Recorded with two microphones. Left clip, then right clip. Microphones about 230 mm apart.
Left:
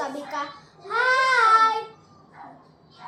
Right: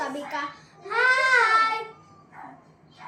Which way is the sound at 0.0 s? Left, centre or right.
Centre.